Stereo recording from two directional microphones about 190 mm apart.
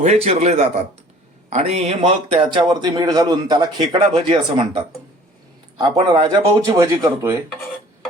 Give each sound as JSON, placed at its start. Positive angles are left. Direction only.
{"t": 0.0, "sound": "a man's voice", "side_deg": -35}
{"t": 5.7, "sound": "speech", "side_deg": -25}